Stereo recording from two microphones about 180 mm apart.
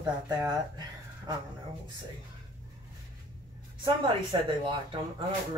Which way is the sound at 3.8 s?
25° right (ahead or behind).